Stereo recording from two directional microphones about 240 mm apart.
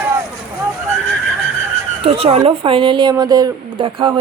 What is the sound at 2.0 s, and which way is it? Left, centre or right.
Speech, right.